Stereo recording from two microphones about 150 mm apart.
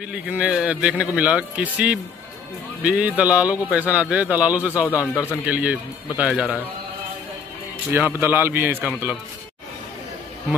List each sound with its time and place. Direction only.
0.1 s a man's voice: 10° right (ahead or behind)
5.0 s a man's voice: 15° left (ahead or behind)
5.5 s a man's voice: 10° right (ahead or behind)
7.9 s a man's voice: 15° right (ahead or behind)